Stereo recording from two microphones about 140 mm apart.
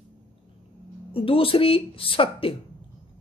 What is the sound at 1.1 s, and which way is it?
A woman's voice, 40° left (ahead or behind).